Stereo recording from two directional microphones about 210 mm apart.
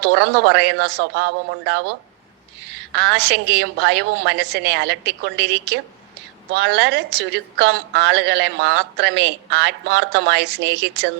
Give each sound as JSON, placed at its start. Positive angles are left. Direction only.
{"t": 0.0, "sound": "a woman's voice", "side_deg": -55}